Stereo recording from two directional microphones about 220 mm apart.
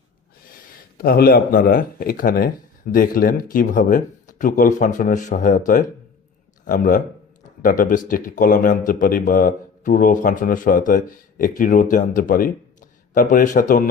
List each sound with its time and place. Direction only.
0.9 s a man's voice: 45° left (ahead or behind)